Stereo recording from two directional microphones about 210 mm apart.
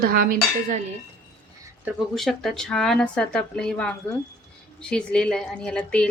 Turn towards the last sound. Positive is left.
turn(degrees=5)  # may be behind; listen again after turning